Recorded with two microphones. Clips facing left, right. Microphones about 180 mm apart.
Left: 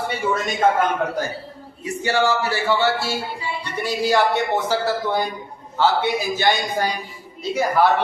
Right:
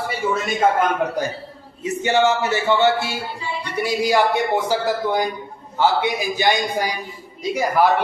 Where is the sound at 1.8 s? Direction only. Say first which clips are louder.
Right 3 dB; 20° right (ahead or behind).